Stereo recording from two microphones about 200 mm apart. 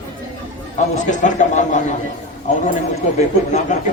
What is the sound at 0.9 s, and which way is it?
Speech, 40° left (ahead or behind).